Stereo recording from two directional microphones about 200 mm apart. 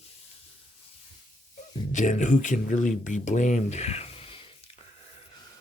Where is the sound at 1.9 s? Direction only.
40° left (ahead or behind).